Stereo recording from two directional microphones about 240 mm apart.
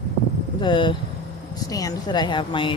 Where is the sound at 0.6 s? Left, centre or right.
Centre.